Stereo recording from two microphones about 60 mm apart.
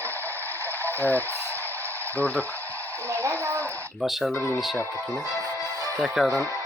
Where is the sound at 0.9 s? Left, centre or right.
Left.